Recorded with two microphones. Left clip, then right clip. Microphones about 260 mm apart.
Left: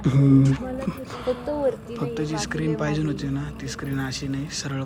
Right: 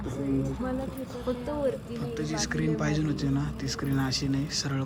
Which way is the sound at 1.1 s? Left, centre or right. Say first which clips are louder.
Left 7 dB; left.